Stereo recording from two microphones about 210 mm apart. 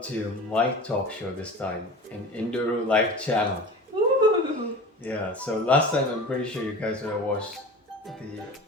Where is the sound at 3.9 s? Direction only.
25° right (ahead or behind).